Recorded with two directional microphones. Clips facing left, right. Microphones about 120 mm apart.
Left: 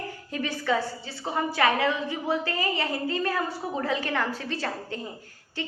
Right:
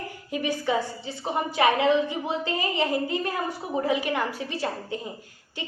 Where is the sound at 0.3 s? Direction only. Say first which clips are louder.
Right 1 dB; 15° right (ahead or behind).